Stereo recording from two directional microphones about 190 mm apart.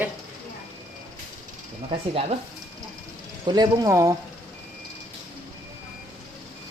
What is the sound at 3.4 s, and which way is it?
Speech, 20° right (ahead or behind).